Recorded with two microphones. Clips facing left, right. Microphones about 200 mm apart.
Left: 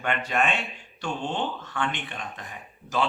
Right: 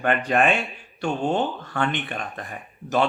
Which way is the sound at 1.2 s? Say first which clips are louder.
Right 8 dB; 40° right (ahead or behind).